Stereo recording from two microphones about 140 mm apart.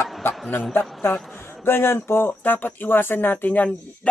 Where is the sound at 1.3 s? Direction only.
15° left (ahead or behind).